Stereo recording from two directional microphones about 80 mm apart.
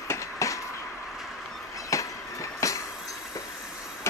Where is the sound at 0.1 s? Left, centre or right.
Left.